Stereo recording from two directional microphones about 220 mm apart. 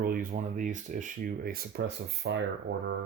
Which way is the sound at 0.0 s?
40° right (ahead or behind).